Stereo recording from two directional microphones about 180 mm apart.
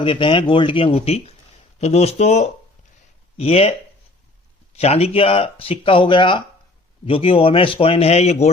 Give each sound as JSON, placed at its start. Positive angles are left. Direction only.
{"t": 0.0, "sound": "speech", "side_deg": 30}